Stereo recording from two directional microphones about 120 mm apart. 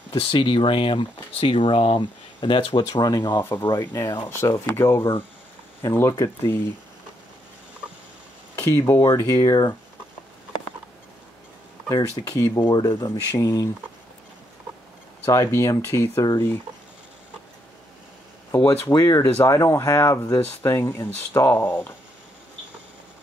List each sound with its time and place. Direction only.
0.2 s speech: 50° left (ahead or behind)
2.9 s speech: 35° left (ahead or behind)
3.8 s speech: 20° left (ahead or behind)
8.5 s speech: 20° left (ahead or behind)
11.9 s speech: 30° left (ahead or behind)
15.2 s speech: 30° left (ahead or behind)
18.5 s speech: 20° left (ahead or behind)